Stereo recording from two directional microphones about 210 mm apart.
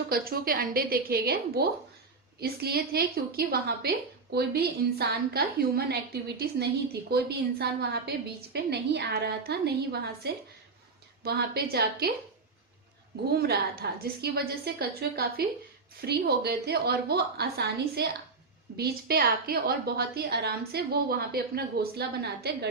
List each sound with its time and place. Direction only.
0.1 s a woman's voice: 45° right (ahead or behind)
13.3 s a woman's voice: 50° right (ahead or behind)